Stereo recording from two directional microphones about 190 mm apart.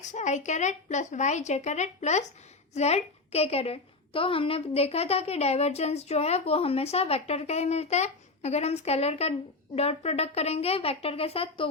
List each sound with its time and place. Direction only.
0.0 s a woman's voice: 40° left (ahead or behind)